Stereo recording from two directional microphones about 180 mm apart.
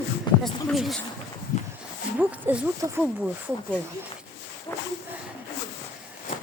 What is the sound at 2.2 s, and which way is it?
Speech, 10° right (ahead or behind).